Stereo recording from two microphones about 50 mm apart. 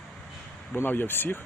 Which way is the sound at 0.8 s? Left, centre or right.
Left.